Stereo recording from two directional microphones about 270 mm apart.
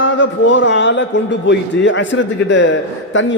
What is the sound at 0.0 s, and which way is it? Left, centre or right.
A man's voice, left.